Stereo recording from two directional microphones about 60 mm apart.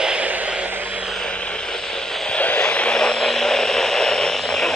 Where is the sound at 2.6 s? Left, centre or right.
Centre.